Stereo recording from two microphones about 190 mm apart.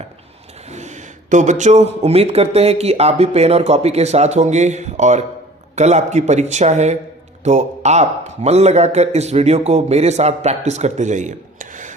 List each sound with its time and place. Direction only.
0.7 s speech: 35° right (ahead or behind)